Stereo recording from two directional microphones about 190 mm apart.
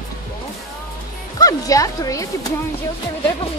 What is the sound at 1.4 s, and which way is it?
Speech, 20° left (ahead or behind).